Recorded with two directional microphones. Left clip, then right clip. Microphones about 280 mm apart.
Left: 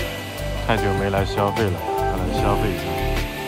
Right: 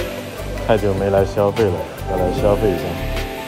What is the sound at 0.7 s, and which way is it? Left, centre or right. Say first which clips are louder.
Speech: right 5 dB; left.